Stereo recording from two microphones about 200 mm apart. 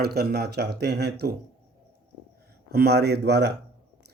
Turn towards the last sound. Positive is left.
turn(degrees=-55)  # may be behind; listen again after turning